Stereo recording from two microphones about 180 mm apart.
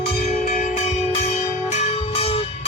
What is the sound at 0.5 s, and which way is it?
Bell, 40° left (ahead or behind).